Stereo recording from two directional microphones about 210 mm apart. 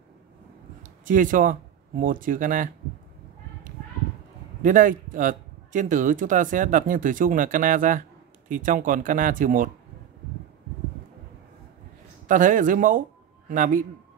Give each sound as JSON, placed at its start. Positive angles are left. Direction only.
{"t": 1.0, "sound": "speech", "side_deg": -40}
{"t": 4.6, "sound": "a man's voice", "side_deg": -40}
{"t": 12.3, "sound": "a man's voice", "side_deg": -40}